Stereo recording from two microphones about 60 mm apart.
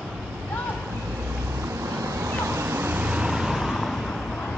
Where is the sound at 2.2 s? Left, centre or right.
Right.